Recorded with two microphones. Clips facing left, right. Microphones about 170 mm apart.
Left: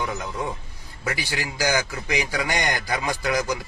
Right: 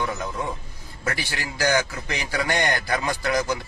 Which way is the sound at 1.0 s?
10° left (ahead or behind).